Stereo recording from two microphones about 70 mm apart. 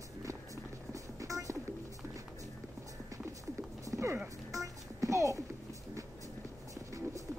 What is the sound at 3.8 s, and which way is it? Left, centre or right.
Clip-clop, right.